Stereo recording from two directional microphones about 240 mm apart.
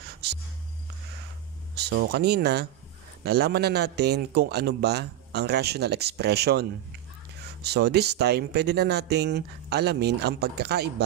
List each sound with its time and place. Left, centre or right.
1.8 s speech: right